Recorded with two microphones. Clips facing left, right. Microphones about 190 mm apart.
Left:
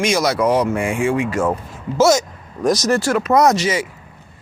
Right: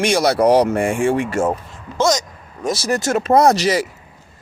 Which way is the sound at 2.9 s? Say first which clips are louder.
Even; 25° right (ahead or behind).